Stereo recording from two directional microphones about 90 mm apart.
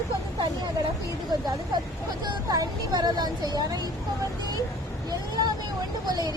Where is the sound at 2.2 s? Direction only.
45° right (ahead or behind).